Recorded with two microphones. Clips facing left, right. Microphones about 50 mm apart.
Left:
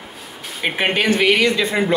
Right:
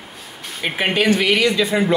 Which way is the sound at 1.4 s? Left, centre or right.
Left.